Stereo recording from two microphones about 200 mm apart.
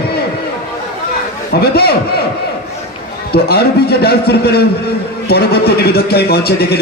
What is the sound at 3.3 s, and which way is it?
A man's voice, 50° left (ahead or behind).